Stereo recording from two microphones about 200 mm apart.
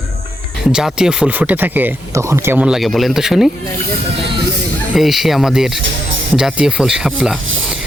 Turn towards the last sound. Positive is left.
turn(degrees=-75)  # may be behind; listen again after turning